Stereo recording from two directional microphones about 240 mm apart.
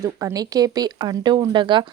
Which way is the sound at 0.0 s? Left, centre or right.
Centre.